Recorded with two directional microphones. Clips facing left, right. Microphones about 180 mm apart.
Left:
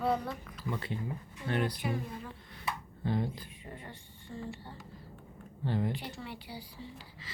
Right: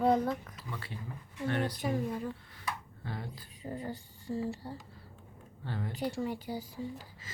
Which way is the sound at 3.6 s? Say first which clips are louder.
Right 8 dB; 35° right (ahead or behind).